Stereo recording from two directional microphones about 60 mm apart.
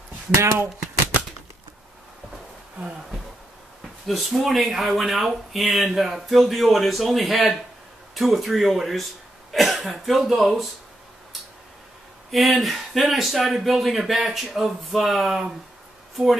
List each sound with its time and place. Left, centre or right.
0.3 s speech: right
4.1 s speech: centre
12.3 s speech: centre